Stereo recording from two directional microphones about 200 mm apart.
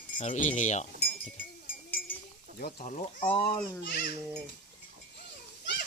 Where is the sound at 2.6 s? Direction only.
50° left (ahead or behind).